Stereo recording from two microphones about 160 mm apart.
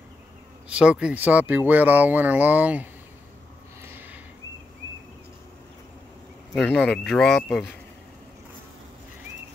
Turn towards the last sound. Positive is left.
turn(degrees=0)  # may be behind; listen again after turning